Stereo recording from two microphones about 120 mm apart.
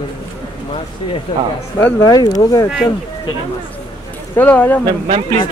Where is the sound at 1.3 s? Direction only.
40° left (ahead or behind).